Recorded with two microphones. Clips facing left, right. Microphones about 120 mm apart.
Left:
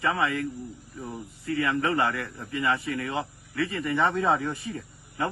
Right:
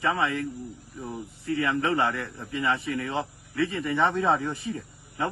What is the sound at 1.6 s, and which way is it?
Speech, 20° right (ahead or behind).